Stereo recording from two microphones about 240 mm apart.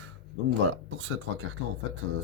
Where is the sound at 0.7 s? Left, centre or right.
Right.